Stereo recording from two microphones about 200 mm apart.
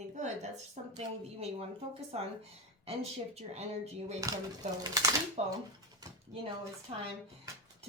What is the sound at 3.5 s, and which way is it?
Speech, 30° right (ahead or behind).